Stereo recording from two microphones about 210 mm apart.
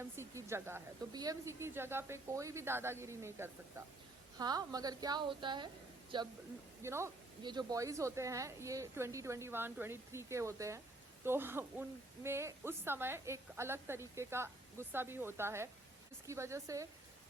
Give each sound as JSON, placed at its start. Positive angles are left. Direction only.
{"t": 0.0, "sound": "a woman's voice", "side_deg": -10}